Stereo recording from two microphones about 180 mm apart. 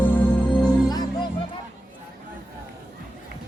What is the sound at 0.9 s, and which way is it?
Music, 25° left (ahead or behind).